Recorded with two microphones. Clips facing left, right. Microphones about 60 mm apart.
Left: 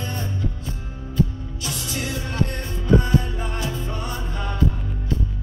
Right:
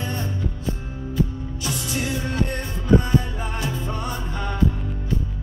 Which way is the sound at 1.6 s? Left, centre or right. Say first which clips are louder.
Right 2 dB; centre.